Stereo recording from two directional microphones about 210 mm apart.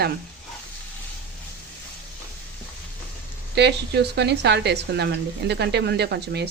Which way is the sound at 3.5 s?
55° right (ahead or behind).